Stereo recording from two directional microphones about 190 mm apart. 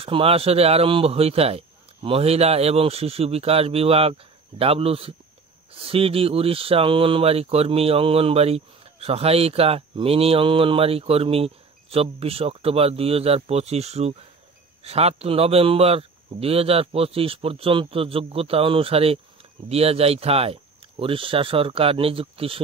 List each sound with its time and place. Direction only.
0.0 s speech: 30° right (ahead or behind)